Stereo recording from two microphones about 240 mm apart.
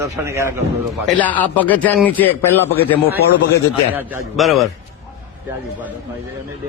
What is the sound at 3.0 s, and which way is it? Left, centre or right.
Speech, left.